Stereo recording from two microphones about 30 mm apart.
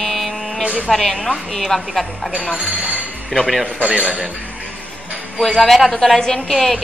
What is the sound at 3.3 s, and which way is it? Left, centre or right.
Speech, centre.